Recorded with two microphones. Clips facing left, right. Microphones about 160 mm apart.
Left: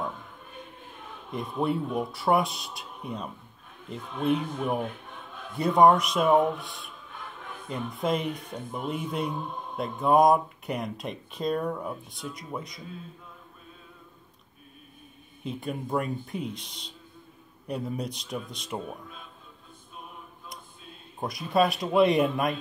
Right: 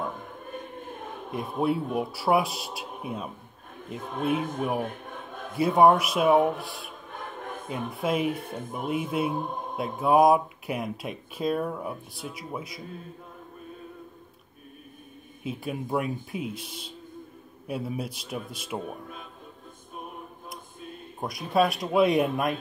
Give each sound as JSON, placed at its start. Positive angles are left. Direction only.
{"t": 0.2, "sound": "choir", "side_deg": -50}
{"t": 1.6, "sound": "speech", "side_deg": -5}
{"t": 2.8, "sound": "a sound", "side_deg": -55}
{"t": 3.8, "sound": "speech", "side_deg": -45}
{"t": 4.8, "sound": "a sound", "side_deg": -45}
{"t": 5.6, "sound": "speech", "side_deg": -5}
{"t": 6.4, "sound": "a sound", "side_deg": -50}
{"t": 8.0, "sound": "speech", "side_deg": -5}
{"t": 8.3, "sound": "speech", "side_deg": -50}
{"t": 9.8, "sound": "speech", "side_deg": -5}
{"t": 15.4, "sound": "speech", "side_deg": -5}
{"t": 18.9, "sound": "speech", "side_deg": -50}
{"t": 21.2, "sound": "speech", "side_deg": 0}